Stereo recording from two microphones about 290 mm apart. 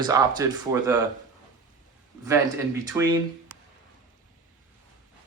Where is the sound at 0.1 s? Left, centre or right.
Centre.